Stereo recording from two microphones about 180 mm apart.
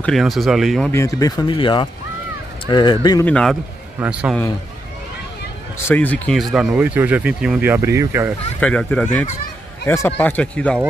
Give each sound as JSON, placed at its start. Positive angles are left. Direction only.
{"t": 0.0, "sound": "speech", "side_deg": 0}
{"t": 0.9, "sound": "speech", "side_deg": 20}
{"t": 3.3, "sound": "speech", "side_deg": 5}
{"t": 4.0, "sound": "a man's voice", "side_deg": -5}
{"t": 5.8, "sound": "speech", "side_deg": 10}
{"t": 8.5, "sound": "speech", "side_deg": 5}